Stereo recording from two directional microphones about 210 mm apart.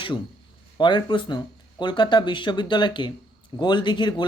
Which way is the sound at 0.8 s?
20° left (ahead or behind).